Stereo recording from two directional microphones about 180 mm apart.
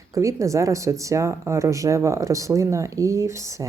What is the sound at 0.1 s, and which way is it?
Speech, 15° right (ahead or behind).